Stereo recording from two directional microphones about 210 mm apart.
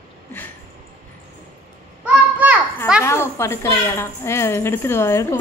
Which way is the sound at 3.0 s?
10° left (ahead or behind).